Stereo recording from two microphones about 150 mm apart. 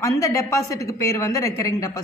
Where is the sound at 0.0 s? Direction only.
20° left (ahead or behind).